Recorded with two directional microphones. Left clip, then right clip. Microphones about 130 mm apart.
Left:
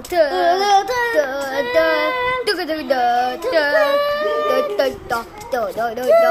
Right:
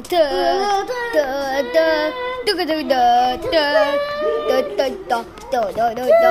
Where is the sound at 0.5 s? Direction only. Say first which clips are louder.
Left 4 dB; centre (ahead or behind).